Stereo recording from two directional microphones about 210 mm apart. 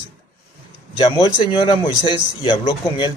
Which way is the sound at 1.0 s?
20° left (ahead or behind).